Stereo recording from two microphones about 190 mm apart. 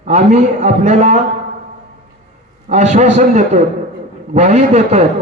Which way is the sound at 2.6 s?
35° right (ahead or behind).